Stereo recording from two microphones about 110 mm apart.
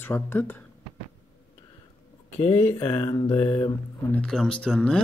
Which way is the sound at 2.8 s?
50° left (ahead or behind).